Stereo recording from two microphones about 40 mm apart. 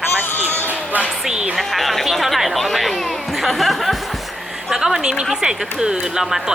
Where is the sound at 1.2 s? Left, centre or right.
Right.